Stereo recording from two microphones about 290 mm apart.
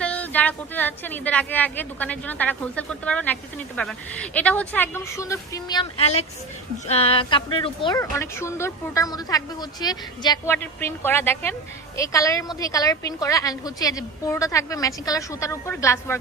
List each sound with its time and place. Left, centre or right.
0.0 s a woman's voice: centre